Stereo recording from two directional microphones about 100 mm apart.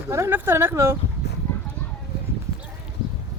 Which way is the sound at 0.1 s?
25° right (ahead or behind).